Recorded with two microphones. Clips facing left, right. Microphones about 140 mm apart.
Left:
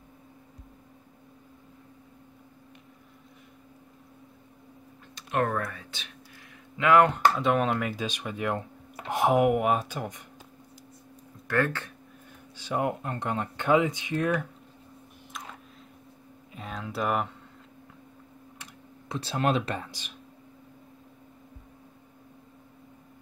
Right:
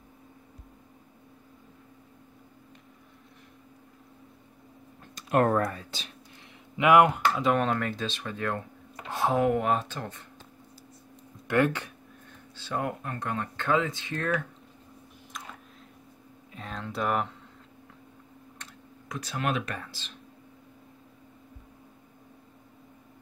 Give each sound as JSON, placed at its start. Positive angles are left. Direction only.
{"t": 5.1, "sound": "speech", "side_deg": -40}
{"t": 6.8, "sound": "speech", "side_deg": -20}
{"t": 7.3, "sound": "speech", "side_deg": 0}
{"t": 11.4, "sound": "speech", "side_deg": -20}
{"t": 12.5, "sound": "speech", "side_deg": 15}
{"t": 16.5, "sound": "a sound", "side_deg": 5}
{"t": 19.0, "sound": "speech", "side_deg": 30}